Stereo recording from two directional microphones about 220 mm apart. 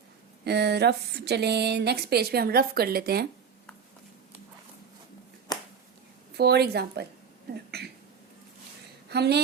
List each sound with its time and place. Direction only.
0.4 s speech: 50° right (ahead or behind)
5.5 s finger snapping: 20° left (ahead or behind)
6.3 s speech: 45° right (ahead or behind)
9.0 s speech: 50° right (ahead or behind)